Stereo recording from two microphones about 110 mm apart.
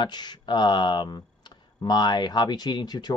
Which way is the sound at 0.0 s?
40° left (ahead or behind).